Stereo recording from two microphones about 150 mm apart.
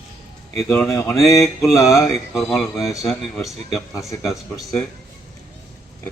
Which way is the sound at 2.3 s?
Centre (ahead or behind).